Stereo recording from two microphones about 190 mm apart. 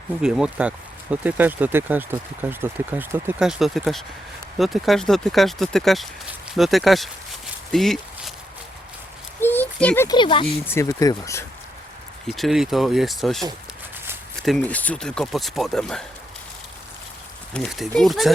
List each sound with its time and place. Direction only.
0.2 s speech: 5° right (ahead or behind)
7.7 s a sound: centre (ahead or behind)
9.4 s a sound: 10° left (ahead or behind)
10.2 s speech: 25° left (ahead or behind)
10.4 s speech: 15° left (ahead or behind)
12.3 s speech: centre (ahead or behind)
14.4 s speech: 5° left (ahead or behind)
17.5 s speech: centre (ahead or behind)